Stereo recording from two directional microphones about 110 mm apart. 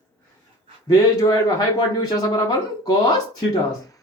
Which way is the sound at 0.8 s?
35° left (ahead or behind).